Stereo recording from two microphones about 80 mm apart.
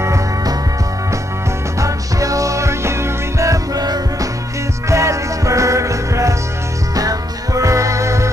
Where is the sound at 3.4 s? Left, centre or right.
Right.